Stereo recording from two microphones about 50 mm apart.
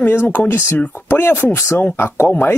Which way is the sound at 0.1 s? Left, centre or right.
Left.